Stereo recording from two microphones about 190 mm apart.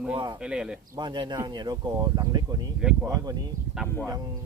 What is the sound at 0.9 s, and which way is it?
Speech, 25° right (ahead or behind).